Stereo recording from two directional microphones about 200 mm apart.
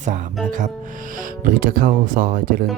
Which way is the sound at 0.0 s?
40° right (ahead or behind).